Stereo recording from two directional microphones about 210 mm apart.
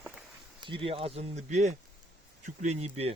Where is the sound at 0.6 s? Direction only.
25° right (ahead or behind).